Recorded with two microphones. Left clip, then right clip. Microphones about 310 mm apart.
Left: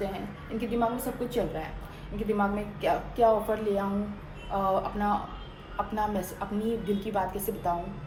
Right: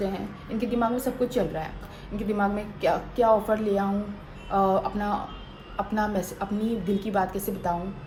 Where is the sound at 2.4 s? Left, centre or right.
Right.